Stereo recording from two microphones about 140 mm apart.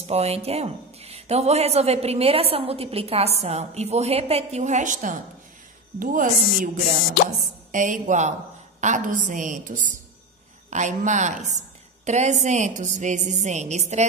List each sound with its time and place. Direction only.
0.0 s a woman's voice: 45° right (ahead or behind); by 6.7 s 70° right (ahead or behind)
7.7 s a woman's voice: 65° right (ahead or behind)